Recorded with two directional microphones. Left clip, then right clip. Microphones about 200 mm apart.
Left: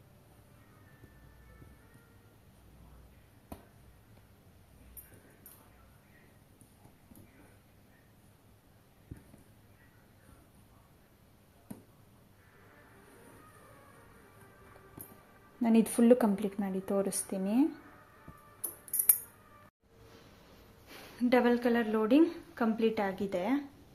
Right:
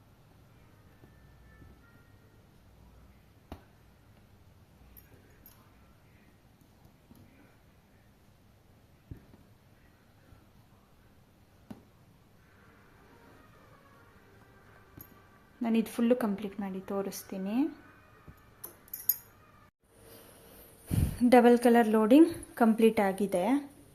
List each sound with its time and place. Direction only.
15.6 s speech: 10° left (ahead or behind)
20.8 s a woman's voice: 15° right (ahead or behind)